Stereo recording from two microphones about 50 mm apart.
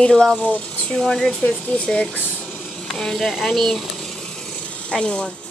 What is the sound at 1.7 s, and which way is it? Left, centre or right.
Speech, left.